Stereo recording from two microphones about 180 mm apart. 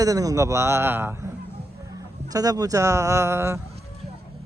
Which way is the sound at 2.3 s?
20° right (ahead or behind).